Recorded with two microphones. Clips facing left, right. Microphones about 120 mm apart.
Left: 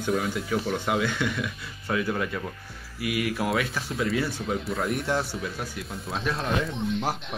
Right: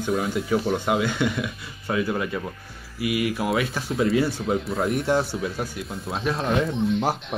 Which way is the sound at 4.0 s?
30° right (ahead or behind).